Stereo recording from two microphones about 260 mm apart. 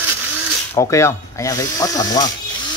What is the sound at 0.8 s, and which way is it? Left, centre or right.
Speech, centre.